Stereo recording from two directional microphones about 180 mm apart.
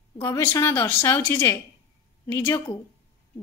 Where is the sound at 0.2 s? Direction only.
15° left (ahead or behind).